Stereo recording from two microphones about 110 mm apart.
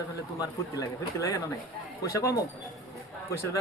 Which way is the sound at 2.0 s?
30° left (ahead or behind).